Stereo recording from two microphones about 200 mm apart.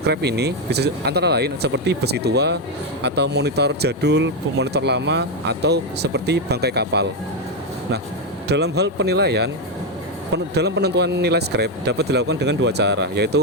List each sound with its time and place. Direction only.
0.0 s speech: 55° right (ahead or behind)
8.4 s speech: 55° right (ahead or behind)